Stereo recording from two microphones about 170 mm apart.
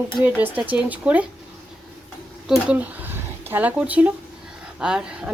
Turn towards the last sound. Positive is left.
turn(degrees=-5)  # may be behind; listen again after turning